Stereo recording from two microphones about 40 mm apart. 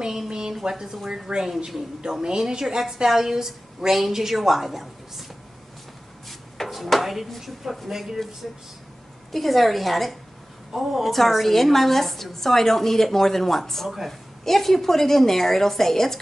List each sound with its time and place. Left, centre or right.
0.3 s a woman's voice: centre
6.2 s a woman's voice: centre
9.3 s a woman's voice: centre
11.1 s a woman's voice: centre
13.8 s a woman's voice: centre
14.4 s a woman's voice: centre